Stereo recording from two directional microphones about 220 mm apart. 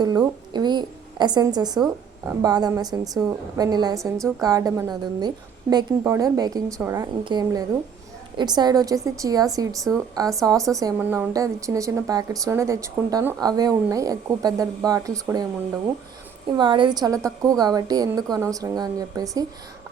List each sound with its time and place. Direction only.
0.0 s a woman's voice: 20° right (ahead or behind)
16.5 s a woman's voice: 20° right (ahead or behind)